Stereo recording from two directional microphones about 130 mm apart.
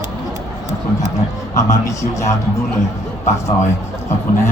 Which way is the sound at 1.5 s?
25° left (ahead or behind).